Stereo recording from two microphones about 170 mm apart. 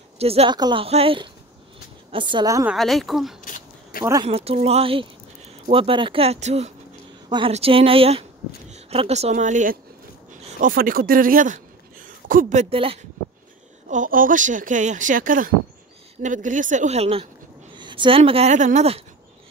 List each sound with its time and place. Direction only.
0.2 s speech: 35° right (ahead or behind)
2.6 s speech: centre (ahead or behind)
3.4 s a sound: 50° left (ahead or behind)
4.0 s speech: 20° right (ahead or behind)
4.3 s speech: 35° right (ahead or behind)
7.2 s speech: 25° right (ahead or behind)
13.8 s speech: 50° right (ahead or behind)